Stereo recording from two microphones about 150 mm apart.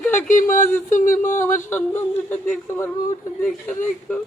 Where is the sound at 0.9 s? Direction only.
55° left (ahead or behind).